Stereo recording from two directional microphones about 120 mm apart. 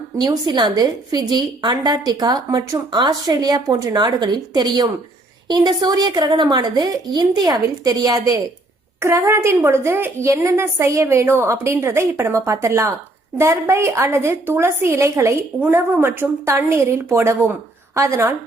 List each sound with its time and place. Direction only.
0.2 s a woman's voice: 35° right (ahead or behind)